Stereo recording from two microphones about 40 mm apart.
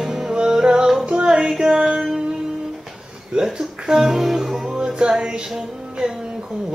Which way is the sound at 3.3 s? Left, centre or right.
Centre.